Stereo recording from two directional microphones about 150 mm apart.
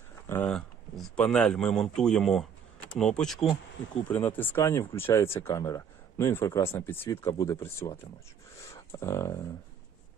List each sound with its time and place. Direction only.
0.3 s speech: 10° left (ahead or behind)